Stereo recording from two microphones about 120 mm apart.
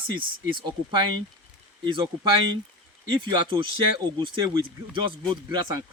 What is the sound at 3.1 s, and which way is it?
Speech, 40° right (ahead or behind).